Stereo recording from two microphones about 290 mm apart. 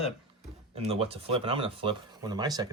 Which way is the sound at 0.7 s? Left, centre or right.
Centre.